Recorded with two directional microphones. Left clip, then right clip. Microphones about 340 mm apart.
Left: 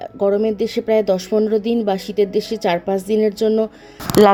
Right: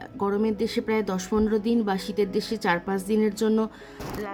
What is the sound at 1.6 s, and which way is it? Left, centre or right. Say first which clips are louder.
Speech: left 7 dB; centre.